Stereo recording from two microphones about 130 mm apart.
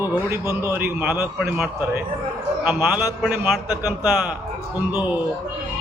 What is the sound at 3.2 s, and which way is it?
Speech, 5° right (ahead or behind).